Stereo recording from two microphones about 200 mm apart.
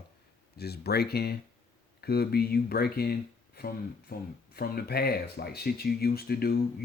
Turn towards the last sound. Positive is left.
turn(degrees=50)  # may be behind; listen again after turning